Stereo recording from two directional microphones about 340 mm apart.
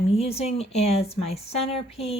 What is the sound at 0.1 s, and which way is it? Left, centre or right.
A woman's voice, centre.